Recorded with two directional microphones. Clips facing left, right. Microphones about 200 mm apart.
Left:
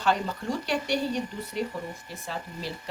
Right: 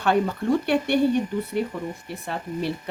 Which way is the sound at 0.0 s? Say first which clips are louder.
Right 5 dB; 60° right (ahead or behind).